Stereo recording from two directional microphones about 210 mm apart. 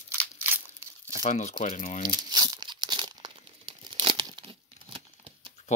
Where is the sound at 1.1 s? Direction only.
35° left (ahead or behind).